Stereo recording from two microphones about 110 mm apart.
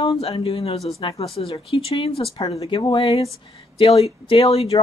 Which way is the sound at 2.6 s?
45° left (ahead or behind).